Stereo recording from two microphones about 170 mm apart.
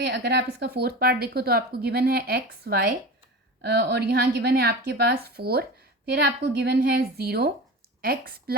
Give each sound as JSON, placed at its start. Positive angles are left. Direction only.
{"t": 0.0, "sound": "a woman's voice", "side_deg": -75}
{"t": 3.6, "sound": "a woman's voice", "side_deg": -75}